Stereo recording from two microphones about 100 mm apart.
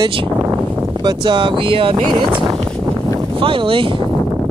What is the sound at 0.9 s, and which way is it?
Speech, 45° right (ahead or behind).